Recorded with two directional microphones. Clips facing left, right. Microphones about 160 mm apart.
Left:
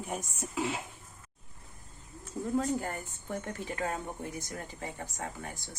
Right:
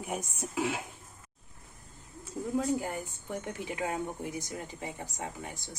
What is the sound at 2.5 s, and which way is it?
Speech, 15° right (ahead or behind).